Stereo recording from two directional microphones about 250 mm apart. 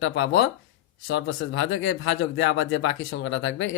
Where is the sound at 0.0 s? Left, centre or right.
Left.